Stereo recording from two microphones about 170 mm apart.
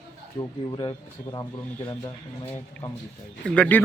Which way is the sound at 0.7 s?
25° left (ahead or behind).